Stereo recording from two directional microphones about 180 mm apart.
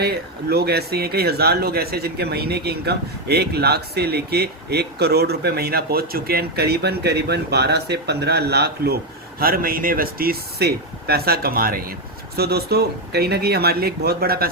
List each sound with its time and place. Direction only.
0.0 s speech: 60° right (ahead or behind)